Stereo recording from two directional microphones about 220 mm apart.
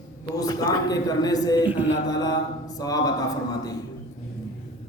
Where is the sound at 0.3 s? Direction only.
15° left (ahead or behind).